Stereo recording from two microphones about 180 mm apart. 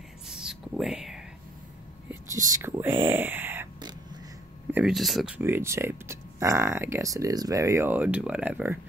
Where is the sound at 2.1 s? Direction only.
20° right (ahead or behind).